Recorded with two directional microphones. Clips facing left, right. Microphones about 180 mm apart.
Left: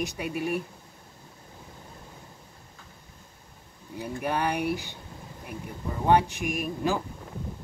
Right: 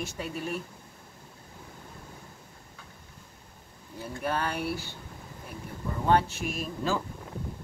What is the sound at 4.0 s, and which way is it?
Speech, 15° left (ahead or behind).